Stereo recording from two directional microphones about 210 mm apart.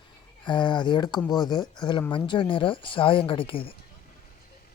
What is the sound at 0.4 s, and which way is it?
Speech, 20° left (ahead or behind).